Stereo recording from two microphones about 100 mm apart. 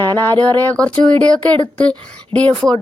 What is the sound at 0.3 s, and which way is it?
Speech, 15° left (ahead or behind).